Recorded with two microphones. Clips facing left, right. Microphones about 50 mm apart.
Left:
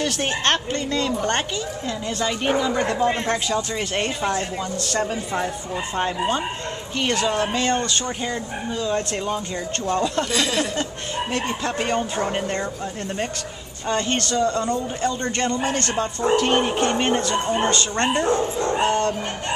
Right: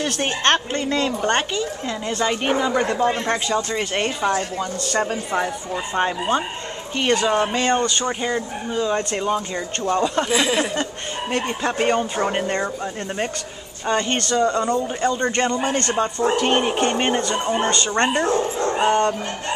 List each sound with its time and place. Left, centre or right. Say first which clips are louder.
0.0 s a man's voice: right 2 dB; centre
0.7 s a woman's voice: right 2 dB; right
2.8 s a man's voice: right 1 dB; centre
13.8 s a man's voice: right 2 dB; centre
16.3 s a woman's voice: left 2 dB; right
16.8 s a man's voice: even; centre